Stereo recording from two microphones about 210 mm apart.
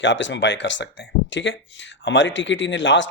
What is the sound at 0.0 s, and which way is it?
Speech, 60° left (ahead or behind).